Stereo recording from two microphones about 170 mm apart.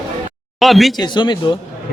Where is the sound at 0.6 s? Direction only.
Centre (ahead or behind).